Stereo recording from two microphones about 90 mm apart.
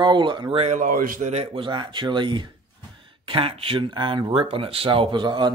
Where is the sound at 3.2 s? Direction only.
80° right.